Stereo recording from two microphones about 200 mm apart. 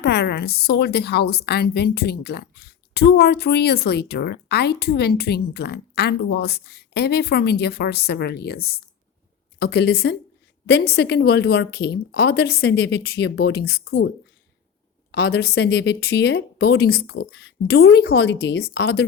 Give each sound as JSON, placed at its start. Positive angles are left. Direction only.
{"t": 0.0, "sound": "a woman's voice", "side_deg": 50}
{"t": 15.1, "sound": "speech", "side_deg": 55}